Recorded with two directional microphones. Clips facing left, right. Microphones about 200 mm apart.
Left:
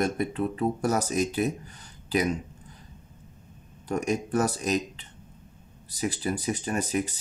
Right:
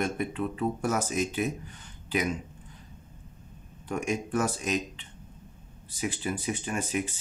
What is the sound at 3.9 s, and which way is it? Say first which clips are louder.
Speech: left 3 dB; 40° left (ahead or behind).